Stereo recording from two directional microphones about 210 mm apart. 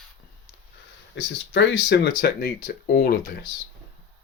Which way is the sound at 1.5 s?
55° left (ahead or behind).